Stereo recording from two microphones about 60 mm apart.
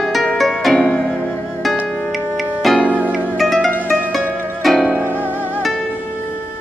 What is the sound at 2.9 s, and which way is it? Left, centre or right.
Harp, right.